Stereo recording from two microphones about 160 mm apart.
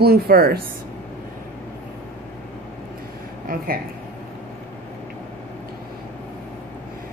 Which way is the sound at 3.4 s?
65° right (ahead or behind).